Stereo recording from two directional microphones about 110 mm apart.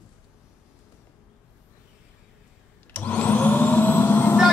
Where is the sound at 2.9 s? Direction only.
10° left (ahead or behind).